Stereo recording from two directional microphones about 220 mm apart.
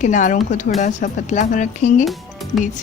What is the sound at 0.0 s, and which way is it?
Speech, 35° left (ahead or behind).